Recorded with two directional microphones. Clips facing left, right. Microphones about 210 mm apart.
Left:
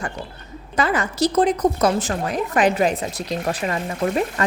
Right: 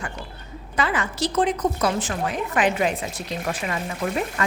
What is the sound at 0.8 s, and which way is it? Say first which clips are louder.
A woman's voice: left 4 dB; 40° left (ahead or behind).